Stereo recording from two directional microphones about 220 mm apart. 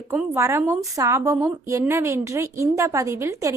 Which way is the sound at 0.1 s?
10° right (ahead or behind).